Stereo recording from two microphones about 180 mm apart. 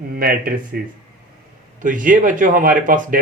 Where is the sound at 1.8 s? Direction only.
45° right (ahead or behind).